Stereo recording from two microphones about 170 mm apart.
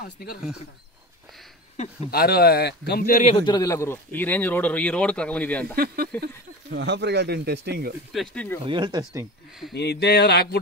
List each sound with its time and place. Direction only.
0.0 s speech: 65° left (ahead or behind)
2.0 s speech: 65° left (ahead or behind)
3.2 s a man's voice: 35° left (ahead or behind); by 5.8 s 10° left (ahead or behind)
5.8 s speech: 60° right (ahead or behind)
8.1 s speech: centre (ahead or behind)
8.6 s speech: 25° right (ahead or behind)
9.8 s speech: 75° left (ahead or behind)